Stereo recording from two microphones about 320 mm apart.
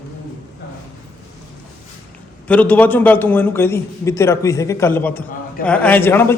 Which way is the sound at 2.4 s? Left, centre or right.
Centre.